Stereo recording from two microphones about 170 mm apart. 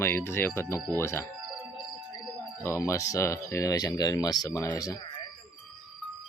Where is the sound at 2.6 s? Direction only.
15° left (ahead or behind).